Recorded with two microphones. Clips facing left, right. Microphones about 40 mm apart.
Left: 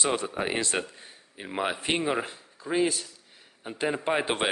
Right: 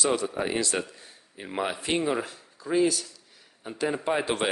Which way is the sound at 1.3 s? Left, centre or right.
Centre.